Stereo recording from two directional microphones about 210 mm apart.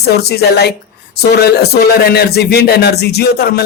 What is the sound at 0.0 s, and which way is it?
Speech, 50° left (ahead or behind).